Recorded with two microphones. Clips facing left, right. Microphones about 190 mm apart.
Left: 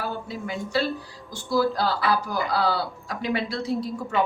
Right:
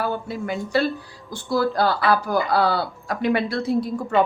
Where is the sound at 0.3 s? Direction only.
55° right (ahead or behind).